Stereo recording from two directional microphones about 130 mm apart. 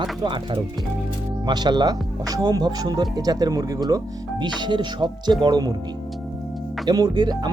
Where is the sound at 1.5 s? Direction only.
35° right (ahead or behind).